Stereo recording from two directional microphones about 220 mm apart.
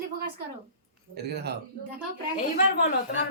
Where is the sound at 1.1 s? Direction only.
45° right (ahead or behind).